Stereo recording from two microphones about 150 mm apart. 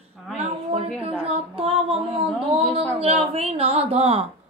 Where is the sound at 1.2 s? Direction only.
40° right (ahead or behind).